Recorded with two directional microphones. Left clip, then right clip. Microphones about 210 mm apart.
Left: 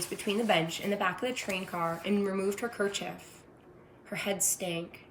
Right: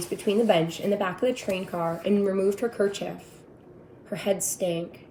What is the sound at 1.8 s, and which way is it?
Speech, 15° left (ahead or behind).